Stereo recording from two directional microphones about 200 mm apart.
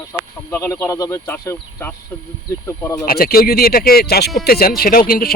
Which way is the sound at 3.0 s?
50° left (ahead or behind).